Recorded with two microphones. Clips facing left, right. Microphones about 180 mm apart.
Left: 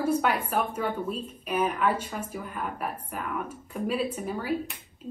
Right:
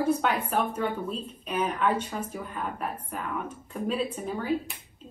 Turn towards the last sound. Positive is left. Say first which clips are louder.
# right 1 dB
turn(degrees=5)  # may be behind; listen again after turning